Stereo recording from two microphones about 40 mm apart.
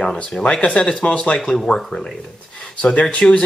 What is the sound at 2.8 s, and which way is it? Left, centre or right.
Speech, left.